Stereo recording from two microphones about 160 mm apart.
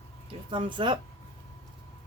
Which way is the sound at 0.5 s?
30° right (ahead or behind).